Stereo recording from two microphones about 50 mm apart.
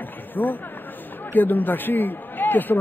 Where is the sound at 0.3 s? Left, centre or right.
Left.